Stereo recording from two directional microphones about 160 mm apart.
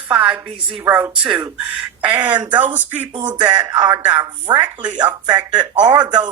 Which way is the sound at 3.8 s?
15° right (ahead or behind).